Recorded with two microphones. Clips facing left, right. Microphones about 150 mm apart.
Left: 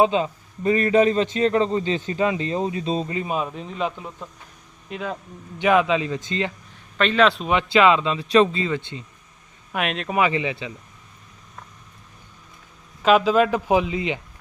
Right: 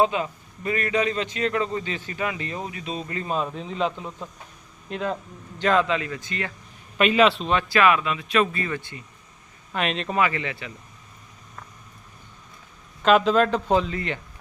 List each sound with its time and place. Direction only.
0.0 s a man's voice: 25° left (ahead or behind)
3.2 s a man's voice: 10° left (ahead or behind)
5.5 s speech: 15° left (ahead or behind)
7.0 s a man's voice: 5° right (ahead or behind)
7.4 s speech: 15° left (ahead or behind)
9.7 s a man's voice: 5° left (ahead or behind)
10.2 s speech: 20° left (ahead or behind)
13.0 s a man's voice: 5° left (ahead or behind)